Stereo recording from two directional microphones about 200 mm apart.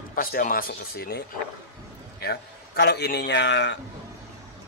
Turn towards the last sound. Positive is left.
turn(degrees=65)  # may be behind; listen again after turning